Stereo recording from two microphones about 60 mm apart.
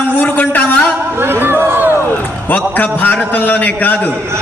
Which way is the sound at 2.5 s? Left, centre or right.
Left.